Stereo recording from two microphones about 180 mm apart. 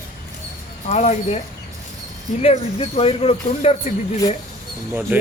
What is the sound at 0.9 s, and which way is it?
Speech, 40° left (ahead or behind).